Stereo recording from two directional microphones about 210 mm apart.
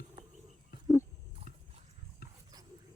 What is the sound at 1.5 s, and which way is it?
Dog, 40° left (ahead or behind).